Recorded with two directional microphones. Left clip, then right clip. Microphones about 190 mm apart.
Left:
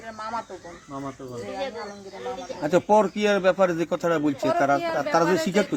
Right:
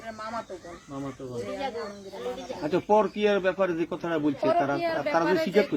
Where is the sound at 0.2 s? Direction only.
Centre (ahead or behind).